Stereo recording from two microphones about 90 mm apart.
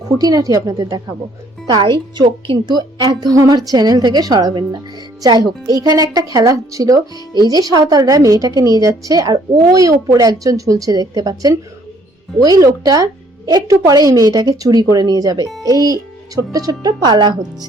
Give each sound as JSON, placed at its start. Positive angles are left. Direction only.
{"t": 0.2, "sound": "a woman's voice", "side_deg": -45}
{"t": 1.8, "sound": "a woman's voice", "side_deg": -65}
{"t": 2.6, "sound": "a woman's voice", "side_deg": -50}